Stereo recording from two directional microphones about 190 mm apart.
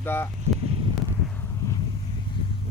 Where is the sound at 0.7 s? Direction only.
30° right (ahead or behind).